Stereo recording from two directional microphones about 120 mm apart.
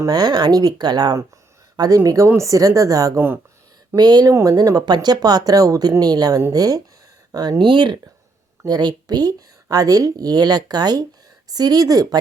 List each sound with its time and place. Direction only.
0.0 s speech: 35° right (ahead or behind)
7.6 s speech: 40° right (ahead or behind)